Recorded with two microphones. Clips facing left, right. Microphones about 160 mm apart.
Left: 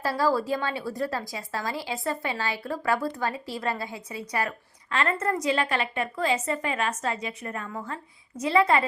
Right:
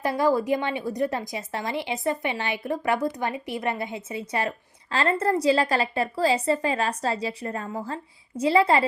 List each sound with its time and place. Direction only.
0.0 s a woman's voice: 20° right (ahead or behind)